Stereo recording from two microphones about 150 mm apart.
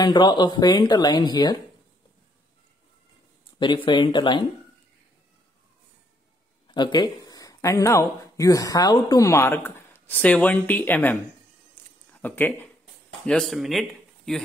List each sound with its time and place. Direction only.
0.0 s speech: 30° left (ahead or behind)
3.5 s speech: 30° left (ahead or behind)
6.7 s speech: 30° left (ahead or behind); by 12.6 s 15° left (ahead or behind)
13.3 s speech: centre (ahead or behind)